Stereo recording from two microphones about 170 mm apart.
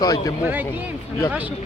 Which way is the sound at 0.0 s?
20° left (ahead or behind).